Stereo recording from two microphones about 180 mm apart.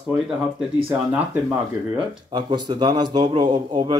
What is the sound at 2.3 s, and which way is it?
A man's voice, 25° right (ahead or behind).